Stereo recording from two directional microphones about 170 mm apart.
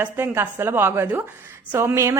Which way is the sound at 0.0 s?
15° right (ahead or behind).